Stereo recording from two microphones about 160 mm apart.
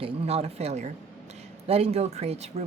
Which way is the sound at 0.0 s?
40° right (ahead or behind).